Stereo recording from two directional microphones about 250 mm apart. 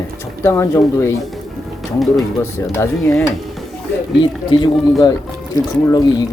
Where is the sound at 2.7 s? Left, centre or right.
Centre.